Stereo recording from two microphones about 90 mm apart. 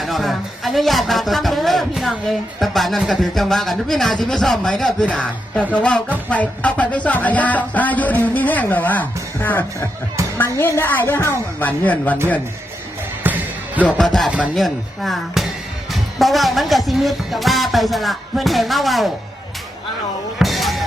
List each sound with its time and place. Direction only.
0.0 s speech: centre (ahead or behind)
5.7 s music: 15° left (ahead or behind)
10.3 s a woman's voice: 25° left (ahead or behind)
13.2 s music: 20° right (ahead or behind)
13.8 s speech: 5° left (ahead or behind)
14.3 s speech: 10° right (ahead or behind)
14.5 s speech: centre (ahead or behind)
20.4 s music: centre (ahead or behind)